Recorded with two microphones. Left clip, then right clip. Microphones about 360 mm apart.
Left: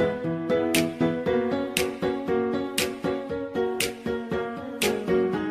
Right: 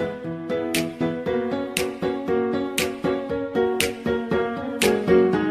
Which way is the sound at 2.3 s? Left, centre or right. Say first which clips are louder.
Right 5 dB; right.